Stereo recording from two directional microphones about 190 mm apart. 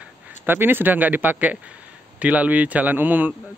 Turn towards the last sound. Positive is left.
turn(degrees=-10)  # may be behind; listen again after turning